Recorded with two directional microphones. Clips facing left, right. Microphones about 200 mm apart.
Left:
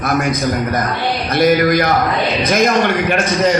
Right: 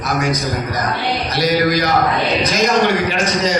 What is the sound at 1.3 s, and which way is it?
A man's voice, 55° left (ahead or behind).